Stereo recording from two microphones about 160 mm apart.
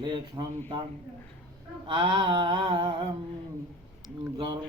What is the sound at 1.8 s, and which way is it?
Mantra, 30° right (ahead or behind).